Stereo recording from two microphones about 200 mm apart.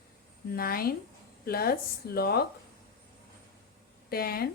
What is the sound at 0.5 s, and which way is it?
Speech, 50° left (ahead or behind).